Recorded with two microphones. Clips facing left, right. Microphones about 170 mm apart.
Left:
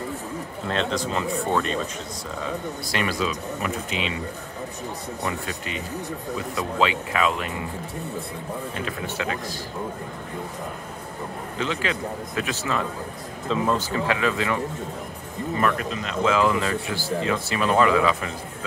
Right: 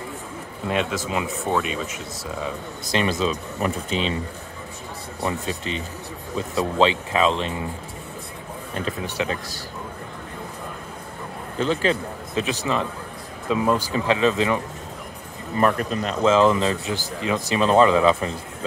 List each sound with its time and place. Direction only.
0.7 s speech: 10° right (ahead or behind)
2.9 s speech: 25° right (ahead or behind)
5.2 s speech: 25° right (ahead or behind)
9.0 s speech: 15° right (ahead or behind)
11.6 s speech: 35° right (ahead or behind)
12.4 s speech: 20° right (ahead or behind)
15.6 s speech: 45° right (ahead or behind)
16.3 s speech: 25° right (ahead or behind)